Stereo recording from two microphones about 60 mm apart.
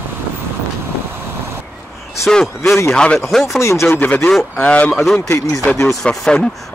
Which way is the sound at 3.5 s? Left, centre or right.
Left.